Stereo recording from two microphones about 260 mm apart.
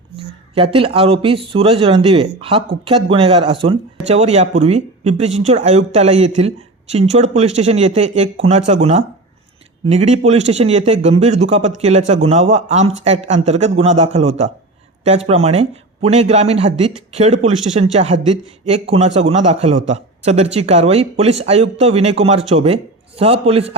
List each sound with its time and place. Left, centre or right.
0.5 s speech: right